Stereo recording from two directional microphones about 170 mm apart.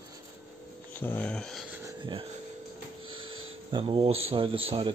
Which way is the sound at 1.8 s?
30° right (ahead or behind).